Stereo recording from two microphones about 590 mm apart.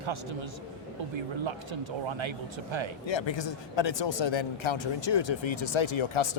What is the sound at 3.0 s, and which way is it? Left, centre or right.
Speech, left.